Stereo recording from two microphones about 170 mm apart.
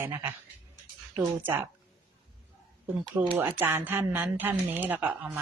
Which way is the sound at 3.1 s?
20° right (ahead or behind).